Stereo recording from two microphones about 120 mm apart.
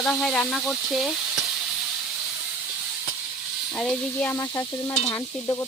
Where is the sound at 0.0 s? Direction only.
5° left (ahead or behind).